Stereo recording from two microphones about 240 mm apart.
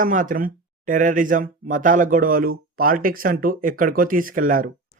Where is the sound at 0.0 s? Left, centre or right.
Right.